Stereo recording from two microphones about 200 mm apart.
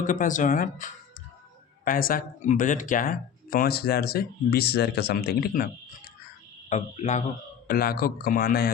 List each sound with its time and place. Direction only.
0.0 s speech: 40° left (ahead or behind)
6.7 s speech: 35° left (ahead or behind)
7.7 s speech: 45° left (ahead or behind)